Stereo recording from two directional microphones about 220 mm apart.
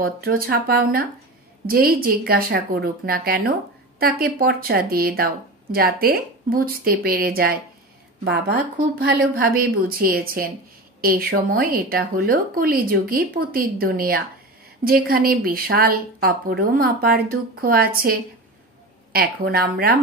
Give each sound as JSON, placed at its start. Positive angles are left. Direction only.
{"t": 0.0, "sound": "speech", "side_deg": -40}
{"t": 19.1, "sound": "speech", "side_deg": -45}